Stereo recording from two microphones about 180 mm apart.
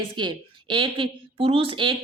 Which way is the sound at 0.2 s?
25° right (ahead or behind).